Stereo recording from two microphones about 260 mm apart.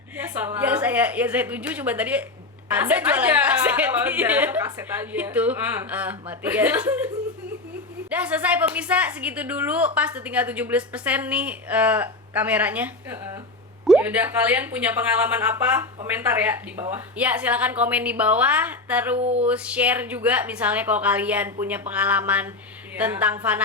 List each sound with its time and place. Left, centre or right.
0.2 s a woman's voice: centre
8.1 s a woman's voice: centre
19.2 s a sound: right
19.5 s a woman's voice: centre